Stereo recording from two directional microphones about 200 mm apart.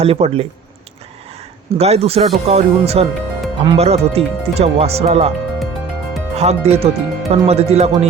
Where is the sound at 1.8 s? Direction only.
30° right (ahead or behind).